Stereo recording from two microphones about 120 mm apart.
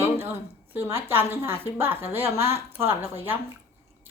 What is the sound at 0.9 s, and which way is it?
A woman's voice, 20° right (ahead or behind).